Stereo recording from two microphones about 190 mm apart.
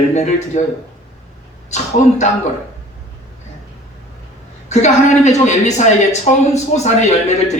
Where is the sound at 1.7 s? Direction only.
35° left (ahead or behind).